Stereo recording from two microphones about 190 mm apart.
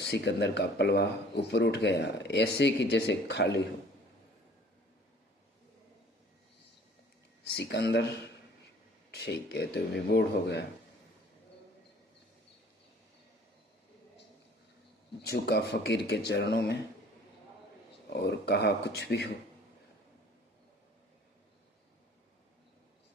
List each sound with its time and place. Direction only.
0.0 s speech: 60° left (ahead or behind)
7.5 s speech: 60° left (ahead or behind)
9.1 s speech: 60° left (ahead or behind)
15.2 s speech: 60° left (ahead or behind)
18.1 s speech: 60° left (ahead or behind)